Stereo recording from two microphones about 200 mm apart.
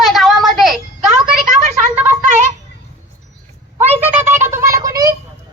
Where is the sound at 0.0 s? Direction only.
Centre (ahead or behind).